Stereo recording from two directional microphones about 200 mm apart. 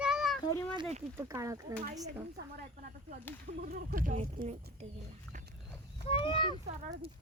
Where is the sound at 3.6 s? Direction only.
45° right (ahead or behind).